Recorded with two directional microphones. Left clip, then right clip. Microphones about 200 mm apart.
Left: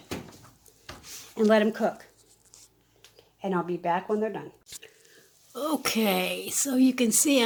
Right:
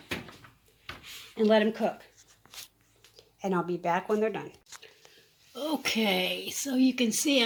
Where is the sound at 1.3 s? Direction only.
5° left (ahead or behind).